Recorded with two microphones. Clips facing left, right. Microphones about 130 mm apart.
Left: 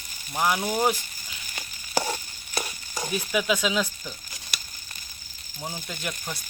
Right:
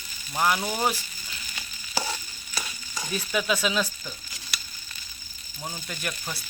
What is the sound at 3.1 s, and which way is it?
Speech, 15° left (ahead or behind).